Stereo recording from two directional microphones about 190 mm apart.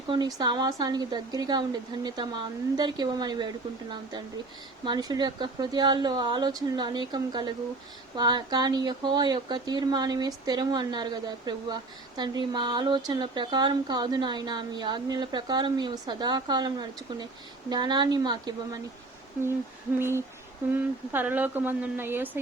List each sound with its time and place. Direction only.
0.1 s speech: 20° right (ahead or behind)
2.7 s speech: 20° right (ahead or behind)
4.9 s speech: 20° right (ahead or behind)
20.0 s a woman's voice: 10° right (ahead or behind)